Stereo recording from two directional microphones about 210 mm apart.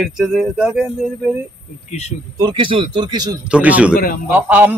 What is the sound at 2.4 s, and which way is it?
Speech, 25° right (ahead or behind).